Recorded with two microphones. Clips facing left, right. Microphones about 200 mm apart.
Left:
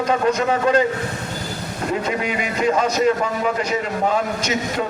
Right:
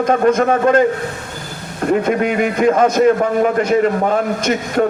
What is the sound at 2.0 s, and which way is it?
A man's voice, 55° right (ahead or behind).